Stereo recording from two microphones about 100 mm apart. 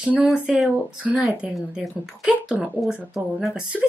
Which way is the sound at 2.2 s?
10° right (ahead or behind).